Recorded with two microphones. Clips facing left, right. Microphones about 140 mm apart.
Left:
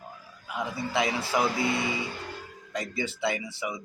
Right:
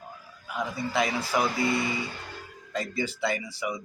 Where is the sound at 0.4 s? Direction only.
25° left (ahead or behind).